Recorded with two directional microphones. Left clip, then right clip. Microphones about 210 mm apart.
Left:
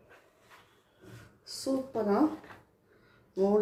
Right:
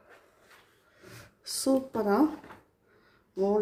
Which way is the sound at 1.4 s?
40° right (ahead or behind).